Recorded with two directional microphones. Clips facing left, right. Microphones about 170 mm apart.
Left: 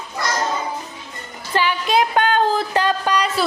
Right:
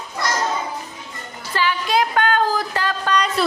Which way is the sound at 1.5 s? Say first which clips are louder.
Left 2 dB; 20° left (ahead or behind).